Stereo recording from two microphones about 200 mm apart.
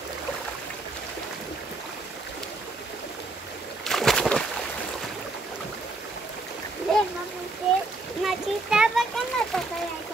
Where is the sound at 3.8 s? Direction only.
Centre (ahead or behind).